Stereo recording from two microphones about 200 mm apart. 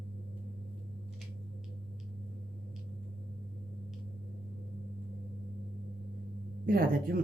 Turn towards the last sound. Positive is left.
turn(degrees=-45)  # may be behind; listen again after turning